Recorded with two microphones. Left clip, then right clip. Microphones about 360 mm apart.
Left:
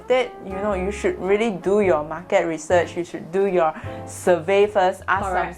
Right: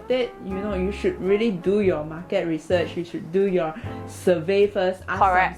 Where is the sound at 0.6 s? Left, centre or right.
Left.